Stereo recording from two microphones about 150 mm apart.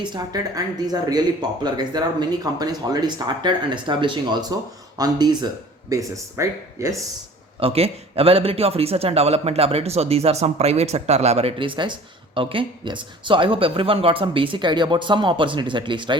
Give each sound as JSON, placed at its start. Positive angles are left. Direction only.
{"t": 0.0, "sound": "speech", "side_deg": -30}
{"t": 7.6, "sound": "a man's voice", "side_deg": -40}